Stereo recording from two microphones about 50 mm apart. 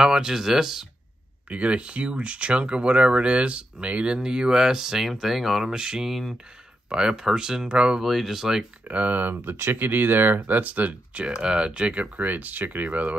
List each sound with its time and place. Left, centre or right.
0.0 s speech: centre
1.5 s speech: right
8.0 s speech: centre
8.8 s speech: right
11.2 s speech: centre